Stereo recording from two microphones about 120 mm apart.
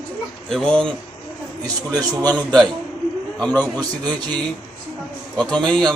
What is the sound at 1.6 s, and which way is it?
Speech, 30° right (ahead or behind).